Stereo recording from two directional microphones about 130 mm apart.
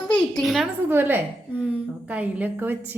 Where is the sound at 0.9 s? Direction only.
15° right (ahead or behind).